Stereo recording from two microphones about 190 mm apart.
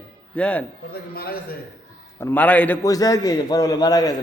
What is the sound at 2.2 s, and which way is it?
A man's voice, 10° left (ahead or behind).